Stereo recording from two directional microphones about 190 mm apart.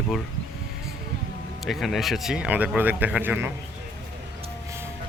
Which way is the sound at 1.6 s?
Centre (ahead or behind).